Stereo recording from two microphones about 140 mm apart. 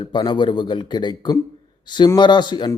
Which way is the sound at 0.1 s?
35° left (ahead or behind).